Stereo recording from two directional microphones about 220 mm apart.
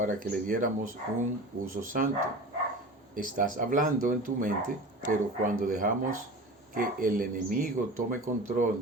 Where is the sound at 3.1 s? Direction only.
35° right (ahead or behind).